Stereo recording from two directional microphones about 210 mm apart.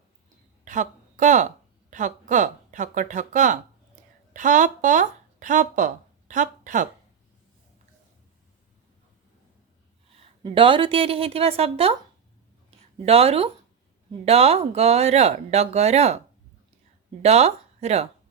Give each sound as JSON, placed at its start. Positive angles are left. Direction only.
{"t": 0.6, "sound": "a sound", "side_deg": -35}
{"t": 1.9, "sound": "speech", "side_deg": -35}
{"t": 10.2, "sound": "a woman's voice", "side_deg": -25}
{"t": 13.1, "sound": "a woman's voice", "side_deg": -30}
{"t": 17.2, "sound": "speech", "side_deg": -30}